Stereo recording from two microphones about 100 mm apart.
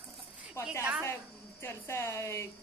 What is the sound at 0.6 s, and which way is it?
A woman's voice, 25° left (ahead or behind).